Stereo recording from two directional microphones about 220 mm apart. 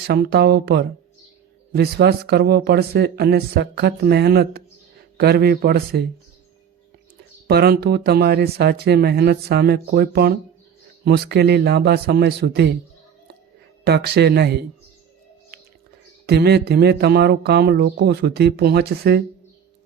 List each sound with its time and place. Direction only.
0.1 s speech: 45° right (ahead or behind)
7.4 s speech: 45° right (ahead or behind)
13.8 s speech: 45° right (ahead or behind)
16.2 s speech: 45° right (ahead or behind)